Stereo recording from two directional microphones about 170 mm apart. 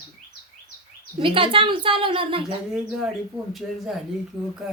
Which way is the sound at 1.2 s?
30° right (ahead or behind).